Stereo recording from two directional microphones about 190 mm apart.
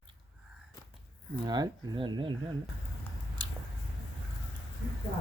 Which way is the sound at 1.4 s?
25° right (ahead or behind).